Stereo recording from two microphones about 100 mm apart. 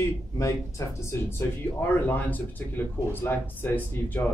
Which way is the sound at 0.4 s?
30° left (ahead or behind).